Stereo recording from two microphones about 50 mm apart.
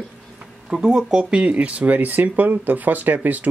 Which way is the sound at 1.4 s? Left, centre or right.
Right.